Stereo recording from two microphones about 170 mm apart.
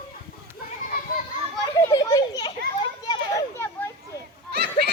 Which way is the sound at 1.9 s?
20° left (ahead or behind).